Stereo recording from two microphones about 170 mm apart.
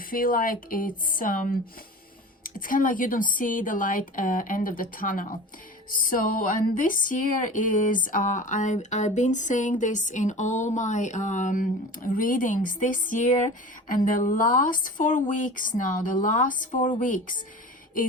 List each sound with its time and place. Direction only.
0.0 s speech: 55° left (ahead or behind)
6.7 s speech: 50° left (ahead or behind)